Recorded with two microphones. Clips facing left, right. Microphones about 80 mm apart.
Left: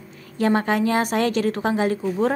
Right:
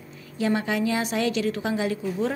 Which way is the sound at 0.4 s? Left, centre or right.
Left.